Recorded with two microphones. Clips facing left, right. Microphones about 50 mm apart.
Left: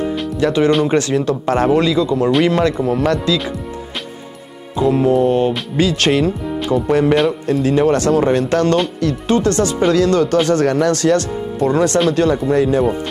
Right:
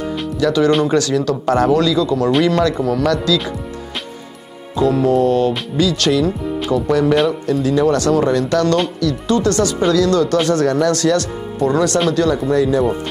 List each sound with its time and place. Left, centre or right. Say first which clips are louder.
0.4 s a man's voice: even; left
4.7 s a man's voice: even; left